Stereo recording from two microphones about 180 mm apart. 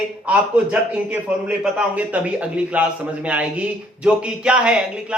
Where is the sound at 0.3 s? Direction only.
5° right (ahead or behind).